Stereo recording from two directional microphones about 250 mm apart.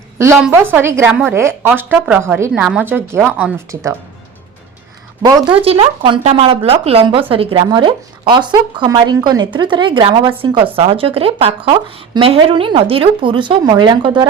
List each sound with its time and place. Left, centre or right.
0.2 s a woman's voice: centre
5.2 s speech: centre